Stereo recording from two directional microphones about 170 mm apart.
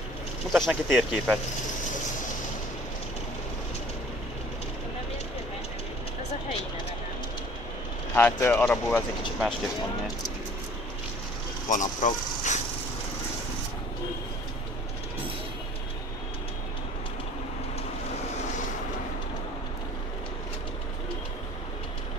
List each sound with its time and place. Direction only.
0.5 s speech: centre (ahead or behind)
8.1 s speech: 10° left (ahead or behind)
11.7 s speech: 50° left (ahead or behind)